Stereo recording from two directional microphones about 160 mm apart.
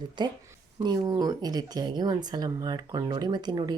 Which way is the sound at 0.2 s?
30° right (ahead or behind).